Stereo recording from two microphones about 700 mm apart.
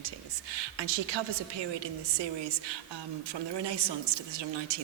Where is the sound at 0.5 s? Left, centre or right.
Right.